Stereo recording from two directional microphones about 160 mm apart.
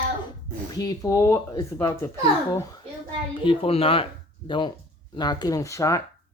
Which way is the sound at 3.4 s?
35° left (ahead or behind).